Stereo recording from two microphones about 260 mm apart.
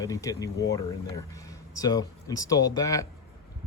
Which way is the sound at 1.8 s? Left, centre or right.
Centre.